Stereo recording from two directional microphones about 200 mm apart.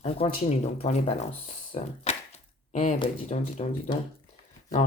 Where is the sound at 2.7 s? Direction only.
35° left (ahead or behind).